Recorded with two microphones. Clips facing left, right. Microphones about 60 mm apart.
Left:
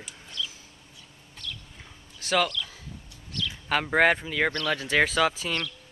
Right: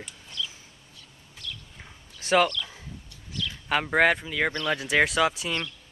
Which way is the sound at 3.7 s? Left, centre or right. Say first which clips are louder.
Even; centre.